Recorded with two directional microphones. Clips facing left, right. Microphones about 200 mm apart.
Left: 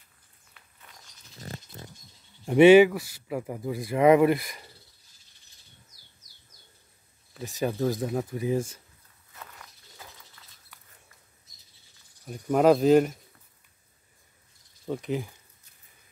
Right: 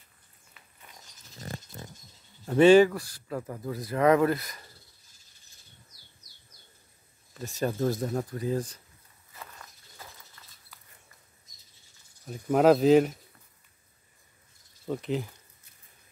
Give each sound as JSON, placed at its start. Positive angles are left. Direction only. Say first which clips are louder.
{"t": 2.4, "sound": "speech", "louder": "left 3 dB", "side_deg": 15}
{"t": 7.3, "sound": "speech", "louder": "left 1 dB", "side_deg": 0}
{"t": 12.3, "sound": "speech", "louder": "even", "side_deg": 0}
{"t": 14.9, "sound": "speech", "louder": "even", "side_deg": 0}